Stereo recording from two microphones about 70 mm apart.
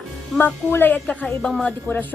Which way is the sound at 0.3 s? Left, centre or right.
Left.